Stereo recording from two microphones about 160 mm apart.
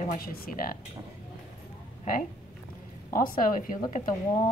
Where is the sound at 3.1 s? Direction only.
60° left (ahead or behind).